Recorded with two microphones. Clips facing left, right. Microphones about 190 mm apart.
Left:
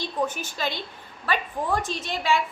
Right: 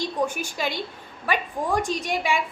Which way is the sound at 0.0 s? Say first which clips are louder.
Right 2 dB; 10° right (ahead or behind).